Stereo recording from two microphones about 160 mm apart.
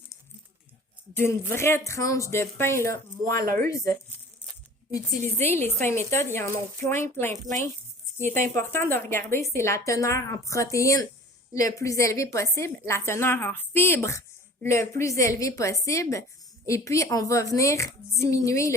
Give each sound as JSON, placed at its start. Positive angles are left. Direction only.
{"t": 1.1, "sound": "a woman's voice", "side_deg": 15}
{"t": 4.9, "sound": "a woman's voice", "side_deg": 15}
{"t": 8.7, "sound": "a woman's voice", "side_deg": 15}